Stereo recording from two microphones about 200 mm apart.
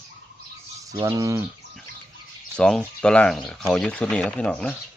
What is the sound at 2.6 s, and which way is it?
Speech, 5° left (ahead or behind).